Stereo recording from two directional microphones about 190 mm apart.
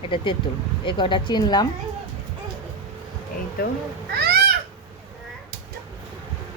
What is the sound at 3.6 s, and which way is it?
Speech, 50° left (ahead or behind).